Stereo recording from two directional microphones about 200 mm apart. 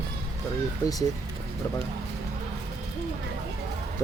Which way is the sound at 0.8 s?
20° left (ahead or behind).